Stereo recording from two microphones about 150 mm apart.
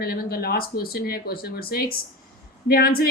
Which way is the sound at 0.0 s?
90° left.